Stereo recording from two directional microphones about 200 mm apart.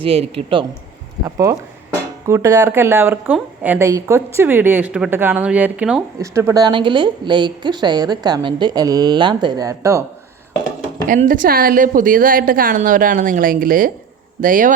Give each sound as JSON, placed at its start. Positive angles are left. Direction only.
{"t": 0.0, "sound": "a woman's voice", "side_deg": -30}
{"t": 1.2, "sound": "speech", "side_deg": -15}
{"t": 6.3, "sound": "a woman's voice", "side_deg": -15}
{"t": 11.1, "sound": "a woman's voice", "side_deg": -40}